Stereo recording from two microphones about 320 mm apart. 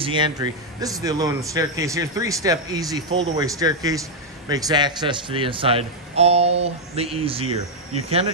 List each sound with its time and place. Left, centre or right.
0.0 s a man's voice: centre